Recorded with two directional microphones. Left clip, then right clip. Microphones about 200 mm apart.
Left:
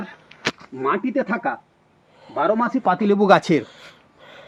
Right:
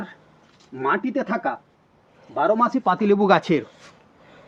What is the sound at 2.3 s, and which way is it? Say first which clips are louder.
Speech: right 1 dB; 25° left (ahead or behind).